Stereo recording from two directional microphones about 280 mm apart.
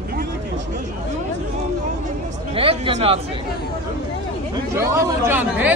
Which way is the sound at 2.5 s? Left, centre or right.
Centre.